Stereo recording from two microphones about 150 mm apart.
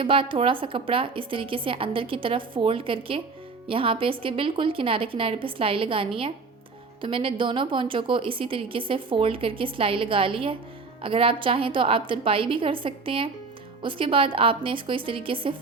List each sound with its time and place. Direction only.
0.0 s a woman's voice: 35° right (ahead or behind)